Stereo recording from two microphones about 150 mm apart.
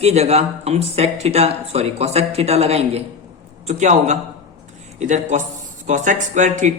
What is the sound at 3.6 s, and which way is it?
A man's voice, 55° right (ahead or behind).